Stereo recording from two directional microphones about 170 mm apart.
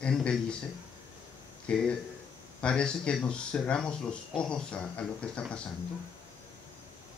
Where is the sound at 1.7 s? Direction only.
5° left (ahead or behind).